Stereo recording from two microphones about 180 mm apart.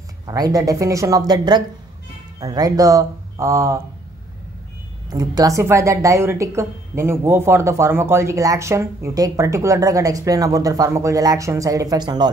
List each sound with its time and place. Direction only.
0.3 s a man's voice: 20° right (ahead or behind)
5.1 s a woman's voice: 20° right (ahead or behind)